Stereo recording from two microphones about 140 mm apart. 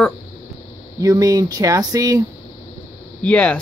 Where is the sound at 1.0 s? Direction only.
25° right (ahead or behind).